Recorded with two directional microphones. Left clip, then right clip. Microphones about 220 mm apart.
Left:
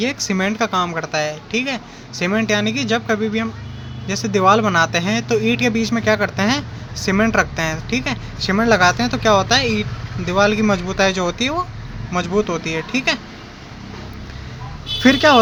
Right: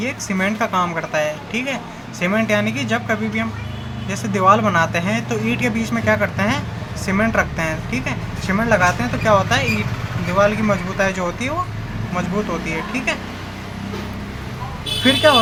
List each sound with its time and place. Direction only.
0.0 s speech: 45° left (ahead or behind)
15.0 s speech: 50° left (ahead or behind)